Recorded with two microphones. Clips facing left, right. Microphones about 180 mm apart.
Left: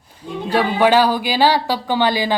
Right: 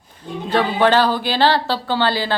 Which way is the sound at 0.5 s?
10° left (ahead or behind).